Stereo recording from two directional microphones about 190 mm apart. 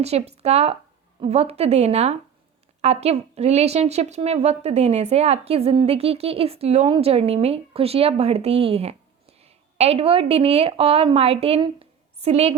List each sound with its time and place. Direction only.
0.0 s a woman's voice: 35° right (ahead or behind)